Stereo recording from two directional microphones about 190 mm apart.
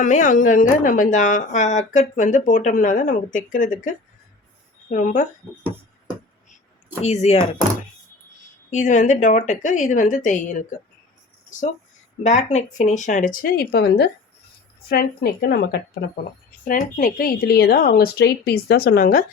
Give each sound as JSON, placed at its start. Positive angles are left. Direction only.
{"t": 0.0, "sound": "a woman's voice", "side_deg": 40}
{"t": 7.0, "sound": "a woman's voice", "side_deg": 35}
{"t": 8.7, "sound": "a woman's voice", "side_deg": 40}
{"t": 12.2, "sound": "a woman's voice", "side_deg": 35}